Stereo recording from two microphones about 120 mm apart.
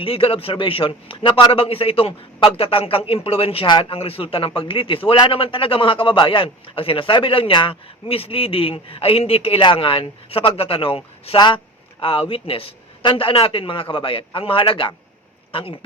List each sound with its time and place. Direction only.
0.0 s a man's voice: 50° left (ahead or behind)